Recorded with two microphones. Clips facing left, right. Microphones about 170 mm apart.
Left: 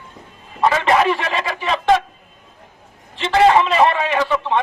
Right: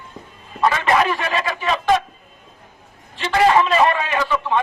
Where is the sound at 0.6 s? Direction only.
25° left (ahead or behind).